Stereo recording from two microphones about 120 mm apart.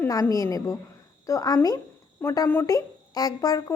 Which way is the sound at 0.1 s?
30° left (ahead or behind).